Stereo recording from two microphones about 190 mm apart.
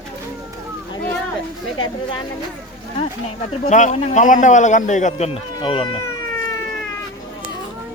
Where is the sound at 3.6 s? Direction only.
40° left (ahead or behind); by 6.1 s 25° left (ahead or behind).